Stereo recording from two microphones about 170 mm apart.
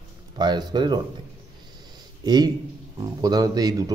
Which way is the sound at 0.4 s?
25° right (ahead or behind).